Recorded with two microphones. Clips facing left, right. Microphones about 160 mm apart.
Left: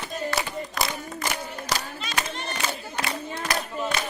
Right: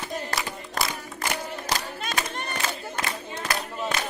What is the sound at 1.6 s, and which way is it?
Battle cry, 50° right (ahead or behind).